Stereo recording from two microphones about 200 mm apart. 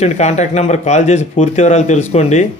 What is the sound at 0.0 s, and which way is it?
Speech, 35° left (ahead or behind).